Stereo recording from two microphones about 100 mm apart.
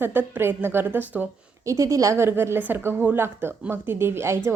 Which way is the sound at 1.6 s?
30° right (ahead or behind).